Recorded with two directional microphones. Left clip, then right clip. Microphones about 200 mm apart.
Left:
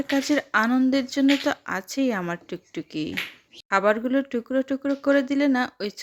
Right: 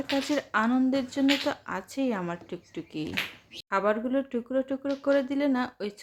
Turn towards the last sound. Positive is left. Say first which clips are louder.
# left 5 dB
turn(degrees=30)  # may be behind; listen again after turning